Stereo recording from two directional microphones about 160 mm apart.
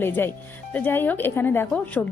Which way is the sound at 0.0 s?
15° left (ahead or behind).